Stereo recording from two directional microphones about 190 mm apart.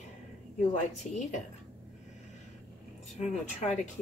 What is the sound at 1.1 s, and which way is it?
Speech, 40° left (ahead or behind).